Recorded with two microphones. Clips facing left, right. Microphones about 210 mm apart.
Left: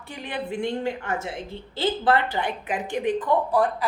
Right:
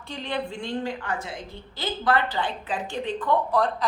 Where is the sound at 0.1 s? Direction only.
15° left (ahead or behind).